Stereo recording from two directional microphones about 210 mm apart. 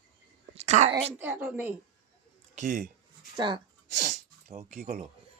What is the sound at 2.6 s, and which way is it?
Speech, 35° right (ahead or behind).